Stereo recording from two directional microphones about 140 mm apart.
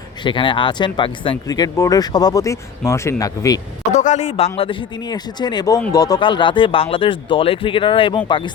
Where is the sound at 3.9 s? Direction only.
55° left (ahead or behind).